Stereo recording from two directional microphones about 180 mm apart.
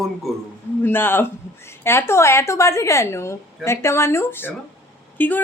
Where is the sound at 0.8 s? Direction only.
10° left (ahead or behind).